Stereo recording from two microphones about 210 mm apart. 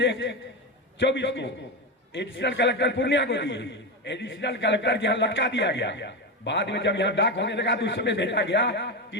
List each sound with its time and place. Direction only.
0.0 s a man's voice: 60° left (ahead or behind)